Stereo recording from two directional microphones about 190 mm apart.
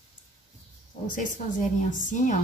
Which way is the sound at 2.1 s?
40° left (ahead or behind).